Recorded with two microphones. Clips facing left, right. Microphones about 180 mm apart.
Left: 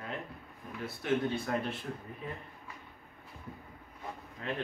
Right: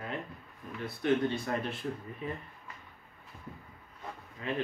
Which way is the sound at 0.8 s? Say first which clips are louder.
Right 3 dB; 5° left (ahead or behind).